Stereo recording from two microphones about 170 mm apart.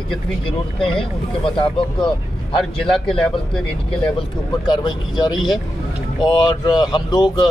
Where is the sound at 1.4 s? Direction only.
30° left (ahead or behind).